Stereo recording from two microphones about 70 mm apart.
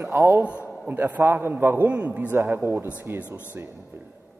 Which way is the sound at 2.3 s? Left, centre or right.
Right.